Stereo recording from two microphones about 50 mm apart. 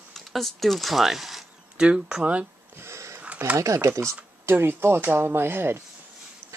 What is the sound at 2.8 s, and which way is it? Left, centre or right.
Sniff, right.